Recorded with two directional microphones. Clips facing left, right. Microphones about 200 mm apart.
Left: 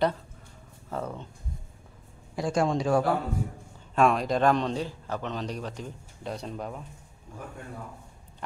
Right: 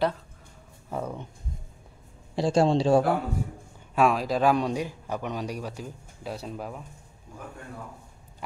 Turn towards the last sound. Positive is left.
turn(degrees=-5)  # may be behind; listen again after turning